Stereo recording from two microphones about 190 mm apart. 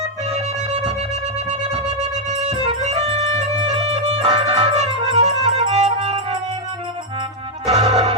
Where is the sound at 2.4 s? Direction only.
30° right (ahead or behind).